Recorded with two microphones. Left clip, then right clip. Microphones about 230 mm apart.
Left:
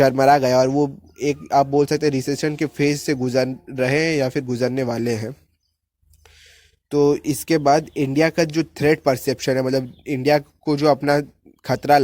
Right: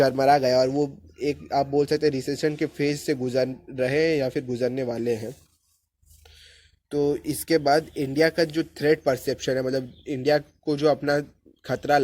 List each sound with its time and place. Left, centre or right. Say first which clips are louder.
0.0 s speech: left 4 dB; left
6.2 s a sound: left 2 dB; left
7.1 s speech: left 4 dB; left